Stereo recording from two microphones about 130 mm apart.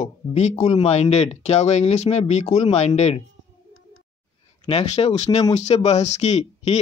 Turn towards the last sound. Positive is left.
turn(degrees=60)  # may be behind; listen again after turning